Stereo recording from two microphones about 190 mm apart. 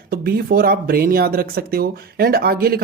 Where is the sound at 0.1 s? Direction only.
55° right (ahead or behind).